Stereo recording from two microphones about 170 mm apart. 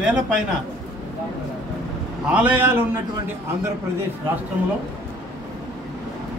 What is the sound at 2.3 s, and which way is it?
Speech, 10° right (ahead or behind).